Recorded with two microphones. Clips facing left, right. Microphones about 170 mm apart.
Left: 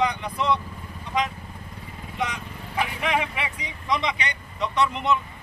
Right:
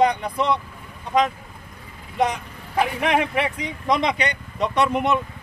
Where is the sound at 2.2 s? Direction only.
50° right (ahead or behind).